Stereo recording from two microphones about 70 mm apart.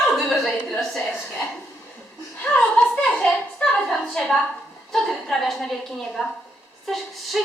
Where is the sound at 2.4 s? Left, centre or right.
Centre.